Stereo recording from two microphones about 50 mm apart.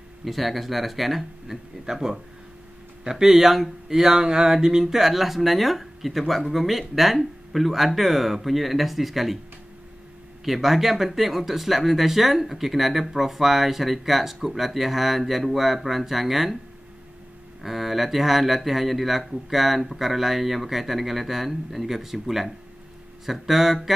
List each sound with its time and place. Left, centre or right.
0.2 s speech: centre
10.4 s speech: centre
17.6 s speech: centre